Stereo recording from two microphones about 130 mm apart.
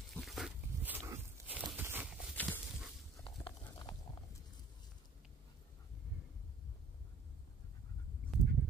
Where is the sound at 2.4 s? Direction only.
10° left (ahead or behind).